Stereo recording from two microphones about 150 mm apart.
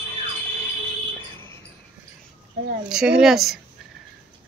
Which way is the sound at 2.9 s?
5° right (ahead or behind).